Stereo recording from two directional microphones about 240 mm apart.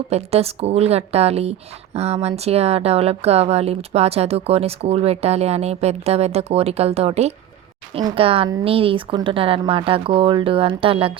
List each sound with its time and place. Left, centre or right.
0.1 s speech: right